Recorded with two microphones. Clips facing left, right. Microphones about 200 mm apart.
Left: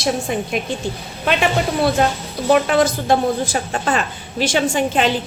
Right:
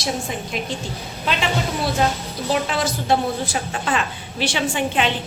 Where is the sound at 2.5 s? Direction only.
55° left (ahead or behind).